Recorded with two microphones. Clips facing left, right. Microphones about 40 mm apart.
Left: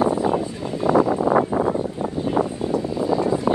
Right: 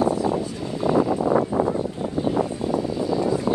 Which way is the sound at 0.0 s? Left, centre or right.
Left.